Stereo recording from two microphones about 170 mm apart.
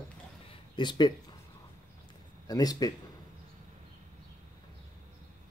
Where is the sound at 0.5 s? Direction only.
25° left (ahead or behind).